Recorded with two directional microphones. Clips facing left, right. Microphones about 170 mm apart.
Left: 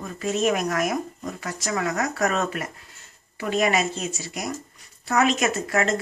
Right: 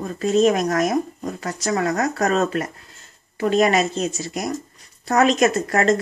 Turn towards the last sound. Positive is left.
turn(degrees=-40)  # may be behind; listen again after turning